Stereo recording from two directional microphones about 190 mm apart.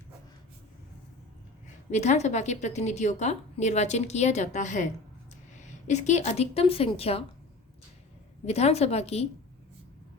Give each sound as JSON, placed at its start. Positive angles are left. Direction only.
{"t": 1.6, "sound": "a woman's voice", "side_deg": 40}
{"t": 8.4, "sound": "a woman's voice", "side_deg": 35}